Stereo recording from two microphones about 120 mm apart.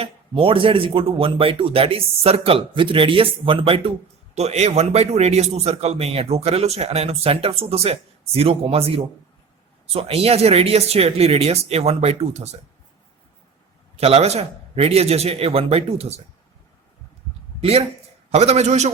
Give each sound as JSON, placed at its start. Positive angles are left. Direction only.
{"t": 0.0, "sound": "speech", "side_deg": -45}
{"t": 4.4, "sound": "a man's voice", "side_deg": -65}
{"t": 13.9, "sound": "a man's voice", "side_deg": -60}
{"t": 17.6, "sound": "a man's voice", "side_deg": -55}